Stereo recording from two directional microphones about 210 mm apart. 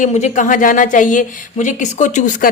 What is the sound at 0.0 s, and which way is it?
Speech, 35° left (ahead or behind).